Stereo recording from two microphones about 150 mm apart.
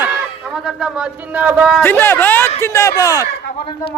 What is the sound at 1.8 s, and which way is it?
Speech, 15° left (ahead or behind).